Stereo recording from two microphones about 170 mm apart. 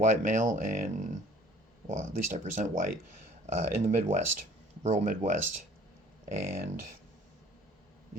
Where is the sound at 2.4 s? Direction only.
45° right (ahead or behind).